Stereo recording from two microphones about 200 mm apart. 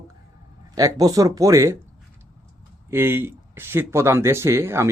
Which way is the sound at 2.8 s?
10° right (ahead or behind).